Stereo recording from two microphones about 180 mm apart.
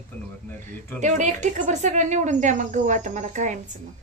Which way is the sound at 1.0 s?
40° right (ahead or behind).